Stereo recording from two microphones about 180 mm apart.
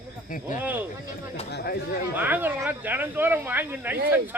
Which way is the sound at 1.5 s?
60° left (ahead or behind).